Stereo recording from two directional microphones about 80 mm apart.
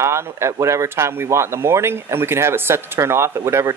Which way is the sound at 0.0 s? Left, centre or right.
Right.